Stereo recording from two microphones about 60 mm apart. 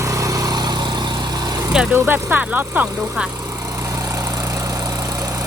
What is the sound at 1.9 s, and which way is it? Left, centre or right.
Speech, right.